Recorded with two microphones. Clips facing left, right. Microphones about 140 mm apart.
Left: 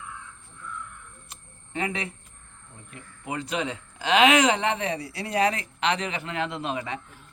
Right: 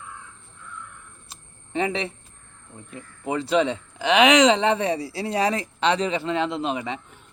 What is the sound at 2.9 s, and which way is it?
Speech, 30° right (ahead or behind).